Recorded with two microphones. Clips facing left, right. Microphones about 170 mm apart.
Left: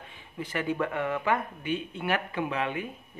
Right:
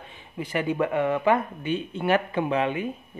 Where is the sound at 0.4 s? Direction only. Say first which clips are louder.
Right 4 dB; 15° right (ahead or behind).